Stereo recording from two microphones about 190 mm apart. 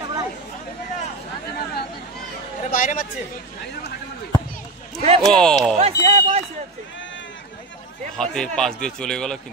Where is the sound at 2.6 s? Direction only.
45° left (ahead or behind).